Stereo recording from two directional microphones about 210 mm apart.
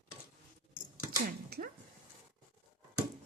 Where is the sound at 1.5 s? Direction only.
45° right (ahead or behind).